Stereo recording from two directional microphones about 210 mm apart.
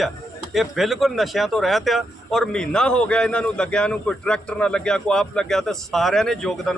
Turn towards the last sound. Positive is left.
turn(degrees=0)  # may be behind; listen again after turning